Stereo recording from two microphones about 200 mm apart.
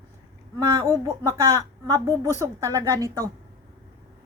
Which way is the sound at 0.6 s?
15° right (ahead or behind).